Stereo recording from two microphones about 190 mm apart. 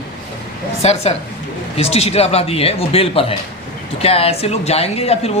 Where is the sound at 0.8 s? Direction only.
35° left (ahead or behind).